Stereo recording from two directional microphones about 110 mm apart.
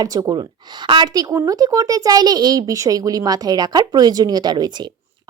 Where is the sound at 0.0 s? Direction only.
35° right (ahead or behind).